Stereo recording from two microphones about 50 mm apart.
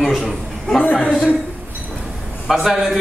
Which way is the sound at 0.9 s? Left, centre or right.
Centre.